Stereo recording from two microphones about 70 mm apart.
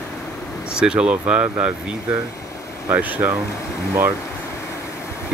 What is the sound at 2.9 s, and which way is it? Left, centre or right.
Speech, right.